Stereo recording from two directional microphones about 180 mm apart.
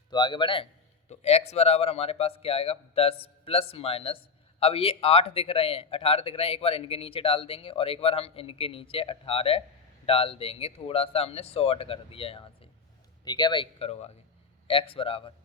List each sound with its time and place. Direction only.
0.1 s speech: 25° left (ahead or behind)